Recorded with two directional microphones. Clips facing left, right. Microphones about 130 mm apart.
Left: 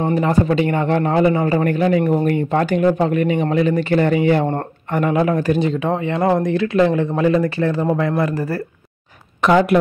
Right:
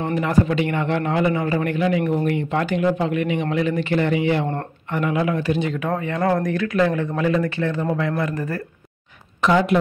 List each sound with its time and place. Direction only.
0.0 s a man's voice: 30° left (ahead or behind)
5.7 s speech: 30° left (ahead or behind)
9.4 s speech: 60° left (ahead or behind)